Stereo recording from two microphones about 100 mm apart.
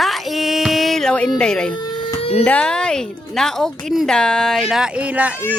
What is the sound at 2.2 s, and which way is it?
Speech, 80° left.